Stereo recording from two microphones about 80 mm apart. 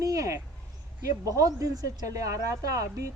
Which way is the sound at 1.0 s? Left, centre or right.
Right.